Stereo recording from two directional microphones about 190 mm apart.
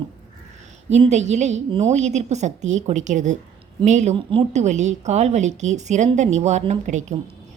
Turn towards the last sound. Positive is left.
turn(degrees=-40)  # may be behind; listen again after turning